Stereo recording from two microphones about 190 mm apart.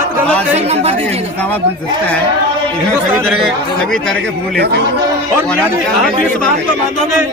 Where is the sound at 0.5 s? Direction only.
35° right (ahead or behind).